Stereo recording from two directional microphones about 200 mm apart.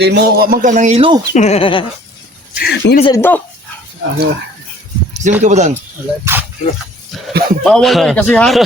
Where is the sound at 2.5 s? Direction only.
50° left (ahead or behind).